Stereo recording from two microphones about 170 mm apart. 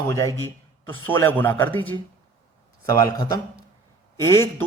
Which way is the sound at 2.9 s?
25° left (ahead or behind).